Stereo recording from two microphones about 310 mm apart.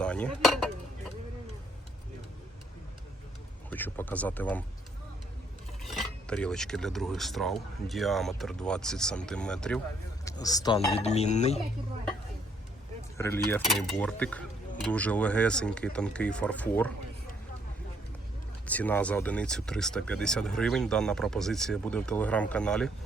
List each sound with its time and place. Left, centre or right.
0.0 s cutlery: centre
3.7 s speech: centre
5.8 s speech: centre; by 11.6 s left
13.1 s speech: centre
18.6 s speech: centre